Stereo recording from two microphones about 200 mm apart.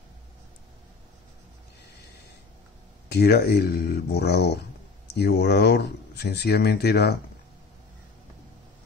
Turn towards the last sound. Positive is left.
turn(degrees=55)  # may be behind; listen again after turning